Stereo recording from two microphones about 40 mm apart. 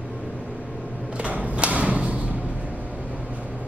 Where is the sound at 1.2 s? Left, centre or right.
Right.